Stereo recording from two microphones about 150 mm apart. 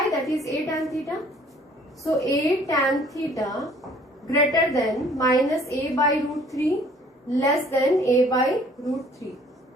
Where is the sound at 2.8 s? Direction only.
Centre (ahead or behind).